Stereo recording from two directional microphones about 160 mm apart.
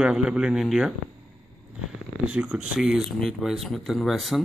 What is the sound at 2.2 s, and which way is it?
A man's voice, 5° right (ahead or behind).